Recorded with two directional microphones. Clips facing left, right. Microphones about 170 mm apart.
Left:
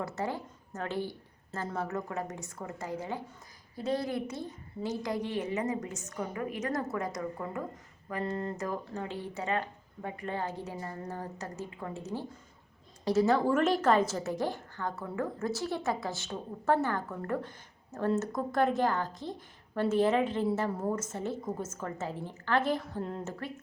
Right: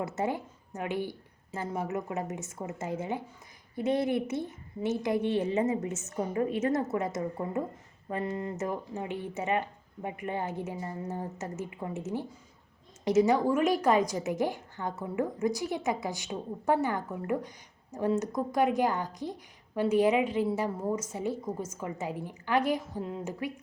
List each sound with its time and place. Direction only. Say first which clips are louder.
0.0 s a woman's voice: right 3 dB; 20° right (ahead or behind)
8.3 s a woman's voice: even; 15° right (ahead or behind)